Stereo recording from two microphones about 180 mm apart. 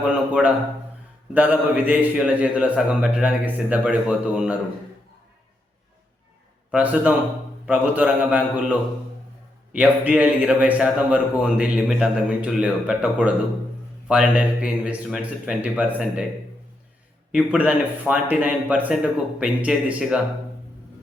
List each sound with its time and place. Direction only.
0.4 s a man's voice: 5° right (ahead or behind)
6.7 s a man's voice: 5° right (ahead or behind)
9.7 s a man's voice: 10° right (ahead or behind)
17.3 s a man's voice: 5° right (ahead or behind)